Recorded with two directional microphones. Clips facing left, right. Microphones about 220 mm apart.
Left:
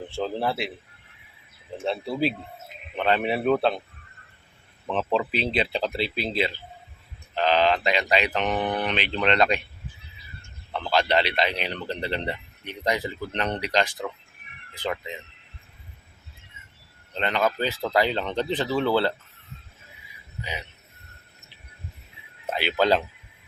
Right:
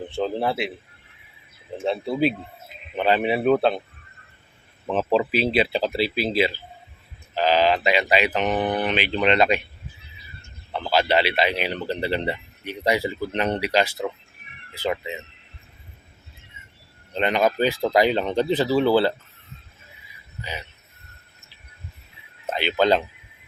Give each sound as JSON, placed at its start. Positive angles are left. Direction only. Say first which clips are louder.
{"t": 0.1, "sound": "speech", "louder": "right 3 dB", "side_deg": 0}
{"t": 1.8, "sound": "speech", "louder": "right 4 dB", "side_deg": 0}
{"t": 5.3, "sound": "speech", "louder": "right 5 dB", "side_deg": -5}
{"t": 10.7, "sound": "speech", "louder": "right 2 dB", "side_deg": -5}
{"t": 17.2, "sound": "speech", "louder": "right 4 dB", "side_deg": -15}
{"t": 20.4, "sound": "speech", "louder": "right 1 dB", "side_deg": 15}
{"t": 22.4, "sound": "speech", "louder": "right 2 dB", "side_deg": 5}